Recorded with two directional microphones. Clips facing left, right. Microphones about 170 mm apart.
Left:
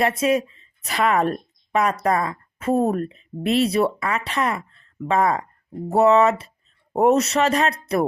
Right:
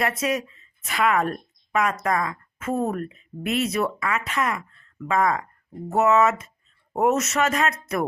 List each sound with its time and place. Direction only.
0.0 s a woman's voice: 25° left (ahead or behind)